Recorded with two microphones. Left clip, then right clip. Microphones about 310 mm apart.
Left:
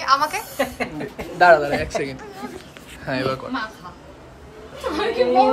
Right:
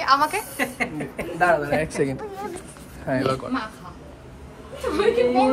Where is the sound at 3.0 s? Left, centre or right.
Centre.